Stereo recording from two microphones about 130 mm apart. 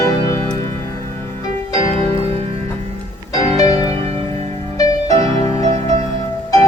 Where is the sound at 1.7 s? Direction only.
50° right (ahead or behind).